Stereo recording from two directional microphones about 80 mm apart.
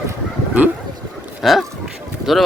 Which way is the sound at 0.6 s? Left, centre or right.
Right.